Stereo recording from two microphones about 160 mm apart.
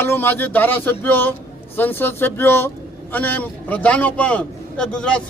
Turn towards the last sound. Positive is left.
turn(degrees=5)  # may be behind; listen again after turning